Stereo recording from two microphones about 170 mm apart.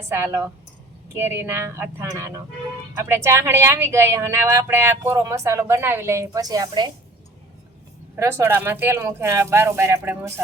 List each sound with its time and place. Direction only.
0.1 s speech: 15° right (ahead or behind)
8.1 s speech: 15° right (ahead or behind)